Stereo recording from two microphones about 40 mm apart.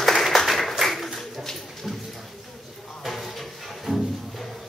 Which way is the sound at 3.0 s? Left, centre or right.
Centre.